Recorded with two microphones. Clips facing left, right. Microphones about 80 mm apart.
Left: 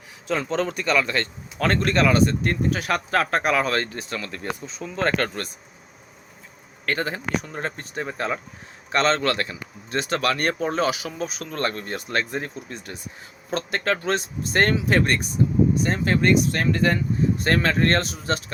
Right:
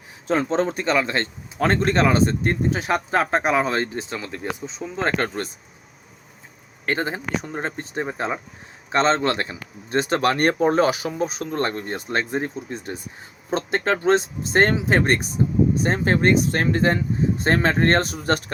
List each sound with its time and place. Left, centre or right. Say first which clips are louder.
0.3 s speech: right 3 dB; right
6.8 s speech: right 1 dB; right